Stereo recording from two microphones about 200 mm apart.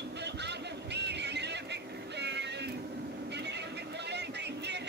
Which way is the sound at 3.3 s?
60° right (ahead or behind).